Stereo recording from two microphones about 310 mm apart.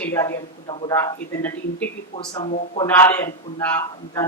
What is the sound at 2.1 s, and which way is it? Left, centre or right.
Speech, centre.